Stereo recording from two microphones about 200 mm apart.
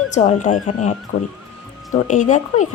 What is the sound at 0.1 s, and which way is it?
Speech, 35° left (ahead or behind).